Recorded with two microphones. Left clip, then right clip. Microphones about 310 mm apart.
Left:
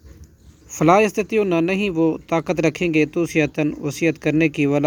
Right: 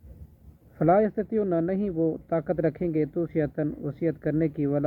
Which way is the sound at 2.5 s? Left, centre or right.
Left.